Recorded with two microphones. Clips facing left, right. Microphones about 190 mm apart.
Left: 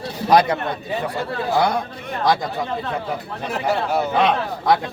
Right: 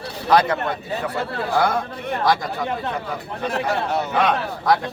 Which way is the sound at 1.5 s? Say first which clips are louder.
Even; 15° left (ahead or behind).